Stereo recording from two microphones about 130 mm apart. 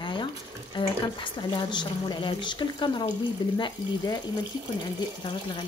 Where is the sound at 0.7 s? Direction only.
35° left (ahead or behind).